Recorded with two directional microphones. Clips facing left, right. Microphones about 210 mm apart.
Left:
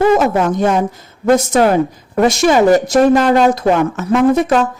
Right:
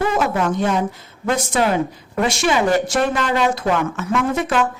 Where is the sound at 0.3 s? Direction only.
45° left (ahead or behind).